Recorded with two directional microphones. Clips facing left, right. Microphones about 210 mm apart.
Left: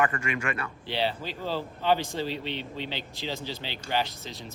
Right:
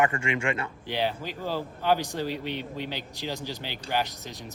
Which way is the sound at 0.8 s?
10° right (ahead or behind).